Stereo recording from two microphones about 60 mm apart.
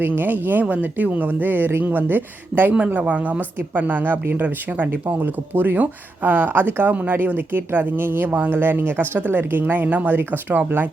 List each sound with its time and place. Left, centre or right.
0.0 s speech: right
2.7 s a woman's voice: right